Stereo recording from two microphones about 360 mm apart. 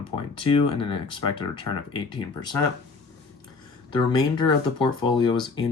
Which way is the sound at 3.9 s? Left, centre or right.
Centre.